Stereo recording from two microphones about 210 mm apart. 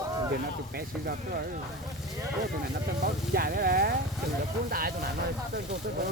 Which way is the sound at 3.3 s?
45° right (ahead or behind).